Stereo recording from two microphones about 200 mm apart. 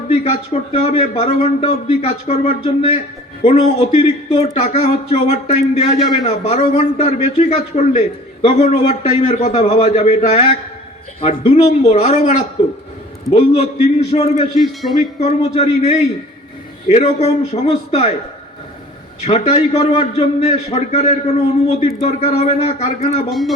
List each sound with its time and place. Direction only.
0.1 s a man's voice: 30° left (ahead or behind)
13.3 s a man's voice: 30° left (ahead or behind)
14.5 s a man's voice: centre (ahead or behind)
15.2 s a man's voice: 30° left (ahead or behind)
19.2 s a man's voice: 35° left (ahead or behind)